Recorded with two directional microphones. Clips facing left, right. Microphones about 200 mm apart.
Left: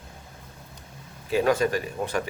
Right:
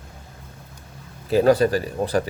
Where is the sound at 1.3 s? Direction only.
35° right (ahead or behind).